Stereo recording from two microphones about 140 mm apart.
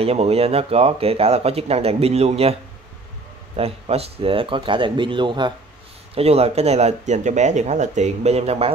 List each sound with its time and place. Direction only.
0.0 s speech: 45° right (ahead or behind)
3.5 s speech: 45° right (ahead or behind)
6.1 s speech: 45° right (ahead or behind)